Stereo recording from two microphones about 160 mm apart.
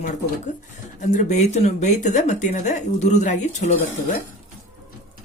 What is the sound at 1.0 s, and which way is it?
Speech, 50° left (ahead or behind).